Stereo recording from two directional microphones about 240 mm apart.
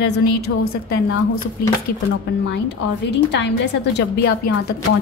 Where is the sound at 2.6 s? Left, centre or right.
Left.